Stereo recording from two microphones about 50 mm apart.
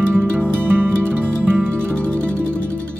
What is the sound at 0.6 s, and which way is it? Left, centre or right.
Music, right.